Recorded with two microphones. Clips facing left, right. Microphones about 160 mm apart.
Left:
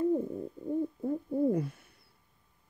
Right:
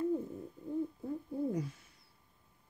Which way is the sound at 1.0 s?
60° left (ahead or behind).